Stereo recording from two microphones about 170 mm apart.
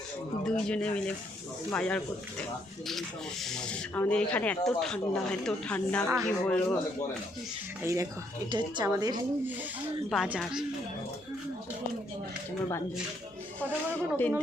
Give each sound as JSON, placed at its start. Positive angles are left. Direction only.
{"t": 0.7, "sound": "speech", "side_deg": 5}
{"t": 3.4, "sound": "speech", "side_deg": 5}
{"t": 7.8, "sound": "a woman's voice", "side_deg": -15}
{"t": 10.1, "sound": "speech", "side_deg": -5}
{"t": 13.6, "sound": "speech", "side_deg": 10}